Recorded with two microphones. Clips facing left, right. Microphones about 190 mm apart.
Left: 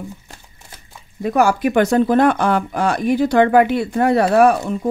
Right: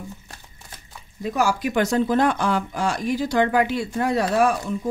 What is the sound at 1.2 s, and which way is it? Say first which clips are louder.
Speech: left 6 dB; 60° left (ahead or behind).